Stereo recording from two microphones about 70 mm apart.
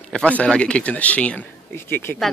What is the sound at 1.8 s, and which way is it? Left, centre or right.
Speech, left.